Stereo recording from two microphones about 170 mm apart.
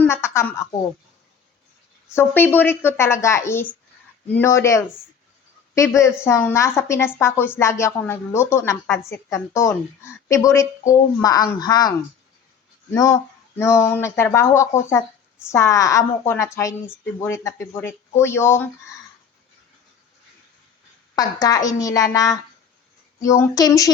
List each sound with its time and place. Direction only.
0.0 s a woman's voice: 15° left (ahead or behind)
2.1 s a woman's voice: 10° left (ahead or behind)
21.2 s a child's voice: 20° left (ahead or behind)